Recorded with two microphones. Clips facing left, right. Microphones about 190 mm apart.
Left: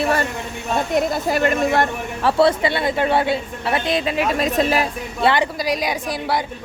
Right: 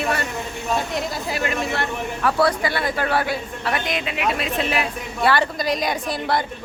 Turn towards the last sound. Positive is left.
turn(degrees=10)  # may be behind; listen again after turning